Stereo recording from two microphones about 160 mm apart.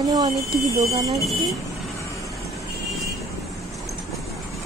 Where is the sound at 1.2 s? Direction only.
Centre (ahead or behind).